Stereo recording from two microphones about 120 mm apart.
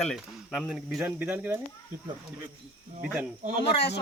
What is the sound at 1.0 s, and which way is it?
Speech, 15° right (ahead or behind).